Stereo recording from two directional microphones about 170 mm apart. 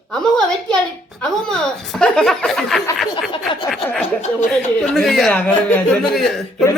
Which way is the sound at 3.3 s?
30° left (ahead or behind).